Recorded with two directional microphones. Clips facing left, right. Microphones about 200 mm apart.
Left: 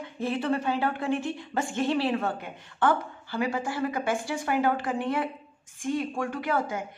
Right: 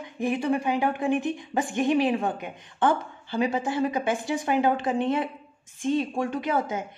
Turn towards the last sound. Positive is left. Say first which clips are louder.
# right 2 dB
turn(degrees=-20)  # may be behind; listen again after turning